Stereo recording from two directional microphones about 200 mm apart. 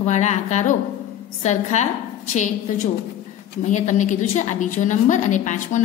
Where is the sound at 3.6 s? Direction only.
40° left (ahead or behind).